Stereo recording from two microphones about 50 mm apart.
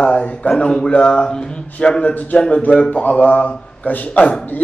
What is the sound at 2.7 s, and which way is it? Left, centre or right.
A man's voice, left.